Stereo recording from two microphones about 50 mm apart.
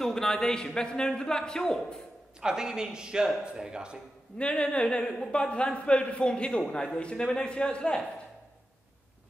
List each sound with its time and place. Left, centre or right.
0.0 s a man's voice: centre
2.4 s speech: centre
4.4 s speech: left